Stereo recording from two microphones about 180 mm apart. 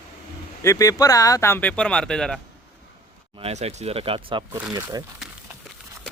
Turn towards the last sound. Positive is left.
turn(degrees=-20)  # may be behind; listen again after turning